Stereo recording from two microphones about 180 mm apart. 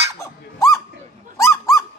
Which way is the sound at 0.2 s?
15° left (ahead or behind).